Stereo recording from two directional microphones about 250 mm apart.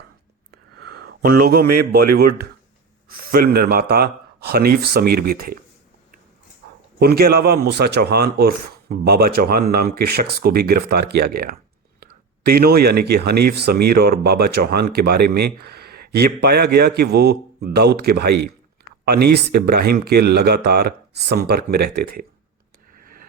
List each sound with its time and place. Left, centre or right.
0.8 s a sound: right
1.2 s speech: right
2.1 s speech: right
7.0 s speech: right